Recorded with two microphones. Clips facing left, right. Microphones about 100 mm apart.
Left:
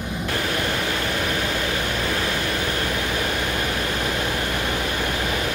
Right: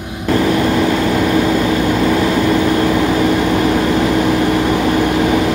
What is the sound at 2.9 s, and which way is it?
Vehicle, 90° right.